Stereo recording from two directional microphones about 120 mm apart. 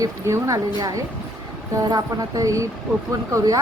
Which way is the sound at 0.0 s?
30° right (ahead or behind).